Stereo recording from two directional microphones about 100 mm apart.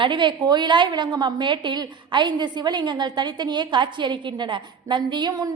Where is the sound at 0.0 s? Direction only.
55° right (ahead or behind).